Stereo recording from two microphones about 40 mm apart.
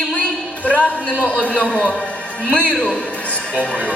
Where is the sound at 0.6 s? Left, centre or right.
Left.